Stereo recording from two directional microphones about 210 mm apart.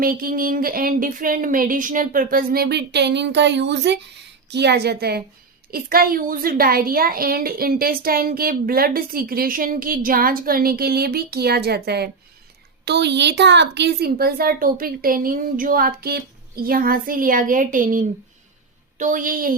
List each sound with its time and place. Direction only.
0.0 s a woman's voice: 45° right (ahead or behind)
12.8 s a woman's voice: 55° right (ahead or behind)